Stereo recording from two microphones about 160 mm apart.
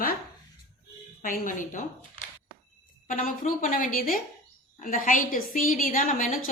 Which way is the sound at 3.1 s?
55° left (ahead or behind).